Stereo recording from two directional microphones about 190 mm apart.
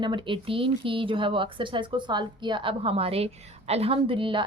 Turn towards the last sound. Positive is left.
turn(degrees=-25)  # may be behind; listen again after turning